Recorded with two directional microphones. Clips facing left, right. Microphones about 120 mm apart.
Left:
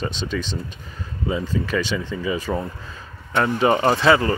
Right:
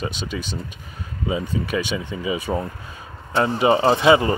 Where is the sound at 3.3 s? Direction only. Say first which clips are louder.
Right 1 dB; 30° right (ahead or behind).